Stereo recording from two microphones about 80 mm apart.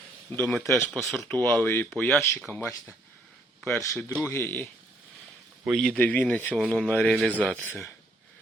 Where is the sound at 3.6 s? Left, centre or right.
Left.